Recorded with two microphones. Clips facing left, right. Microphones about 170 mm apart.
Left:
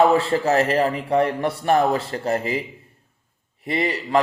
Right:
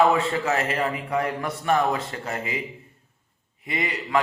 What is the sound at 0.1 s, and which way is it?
A man's voice, 35° left (ahead or behind).